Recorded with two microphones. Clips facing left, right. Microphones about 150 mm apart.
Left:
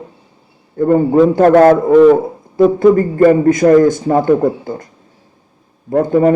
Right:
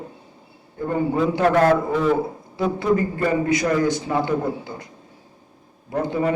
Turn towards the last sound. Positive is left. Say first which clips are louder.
# left 11 dB
turn(degrees=50)  # may be behind; listen again after turning